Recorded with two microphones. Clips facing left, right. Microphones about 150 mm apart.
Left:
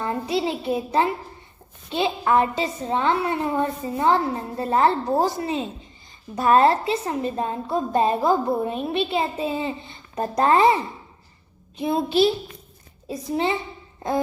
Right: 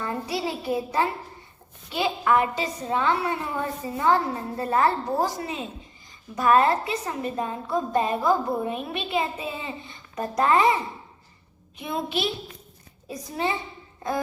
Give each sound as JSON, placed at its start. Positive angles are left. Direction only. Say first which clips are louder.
{"t": 0.0, "sound": "a child's voice", "louder": "left 4 dB", "side_deg": 25}
{"t": 11.8, "sound": "a woman's voice", "louder": "left 8 dB", "side_deg": 30}